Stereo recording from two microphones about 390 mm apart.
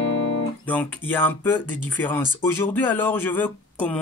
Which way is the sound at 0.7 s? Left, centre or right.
Centre.